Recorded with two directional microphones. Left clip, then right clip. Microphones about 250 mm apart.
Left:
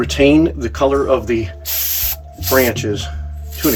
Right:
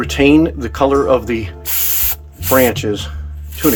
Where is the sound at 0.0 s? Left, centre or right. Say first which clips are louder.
Right 1 dB; centre.